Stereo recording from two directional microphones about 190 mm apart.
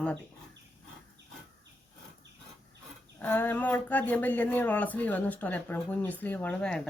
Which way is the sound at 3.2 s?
10° left (ahead or behind).